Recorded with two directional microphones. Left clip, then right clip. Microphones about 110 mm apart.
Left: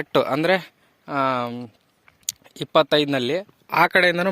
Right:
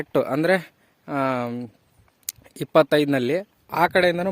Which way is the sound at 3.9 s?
15° right (ahead or behind).